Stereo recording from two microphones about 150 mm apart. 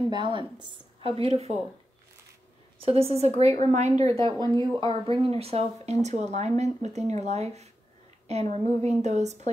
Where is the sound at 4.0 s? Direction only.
20° left (ahead or behind).